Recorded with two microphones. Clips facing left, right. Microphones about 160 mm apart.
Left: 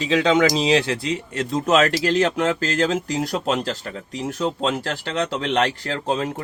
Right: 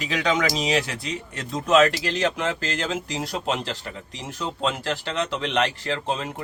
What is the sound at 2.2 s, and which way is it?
Speech, 40° left (ahead or behind).